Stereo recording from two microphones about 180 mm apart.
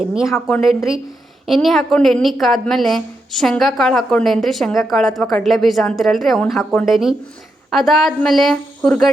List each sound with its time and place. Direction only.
0.1 s a woman's voice: 5° right (ahead or behind)